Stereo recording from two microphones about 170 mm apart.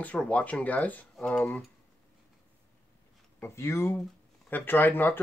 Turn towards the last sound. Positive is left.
turn(degrees=10)  # may be behind; listen again after turning